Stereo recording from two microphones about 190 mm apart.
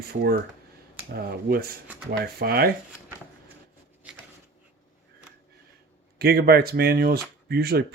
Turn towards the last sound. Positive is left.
turn(degrees=-55)  # may be behind; listen again after turning